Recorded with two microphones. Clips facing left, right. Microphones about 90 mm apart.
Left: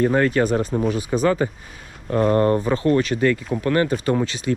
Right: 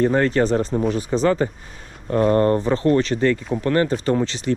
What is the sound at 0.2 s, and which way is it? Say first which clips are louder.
Speech: even; 30° right (ahead or behind).